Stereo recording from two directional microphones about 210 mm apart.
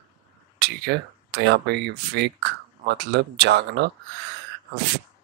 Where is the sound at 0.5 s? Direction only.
50° right (ahead or behind).